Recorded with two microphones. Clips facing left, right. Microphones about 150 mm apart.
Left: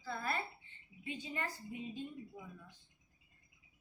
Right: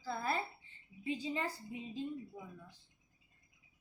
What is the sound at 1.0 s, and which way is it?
A woman's voice, 35° right (ahead or behind).